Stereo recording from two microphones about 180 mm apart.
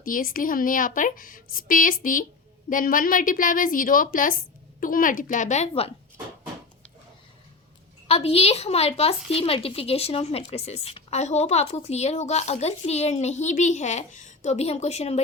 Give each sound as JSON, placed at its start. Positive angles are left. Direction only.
{"t": 0.0, "sound": "speech", "side_deg": 50}
{"t": 8.0, "sound": "a woman's voice", "side_deg": 35}